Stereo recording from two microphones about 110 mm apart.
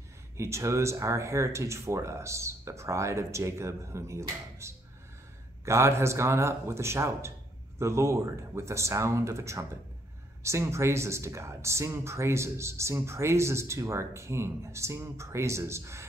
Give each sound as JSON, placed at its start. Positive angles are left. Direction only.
{"t": 0.4, "sound": "speech", "side_deg": -25}